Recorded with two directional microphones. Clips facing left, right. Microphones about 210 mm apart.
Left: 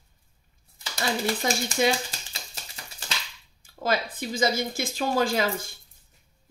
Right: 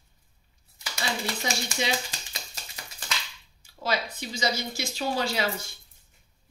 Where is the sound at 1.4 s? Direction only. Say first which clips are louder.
Left 6 dB; 50° left (ahead or behind).